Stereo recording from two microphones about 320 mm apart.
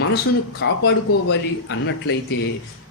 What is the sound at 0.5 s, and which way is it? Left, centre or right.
Speech, left.